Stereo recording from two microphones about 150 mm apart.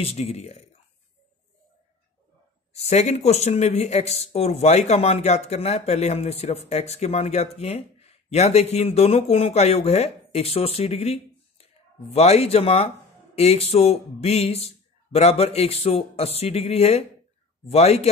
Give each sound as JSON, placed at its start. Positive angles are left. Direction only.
{"t": 0.0, "sound": "speech", "side_deg": 45}
{"t": 2.7, "sound": "speech", "side_deg": 45}